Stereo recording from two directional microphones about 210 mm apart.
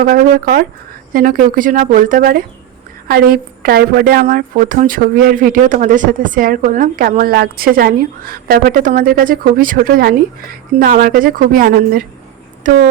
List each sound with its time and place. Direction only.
0.0 s a woman's voice: 45° right (ahead or behind)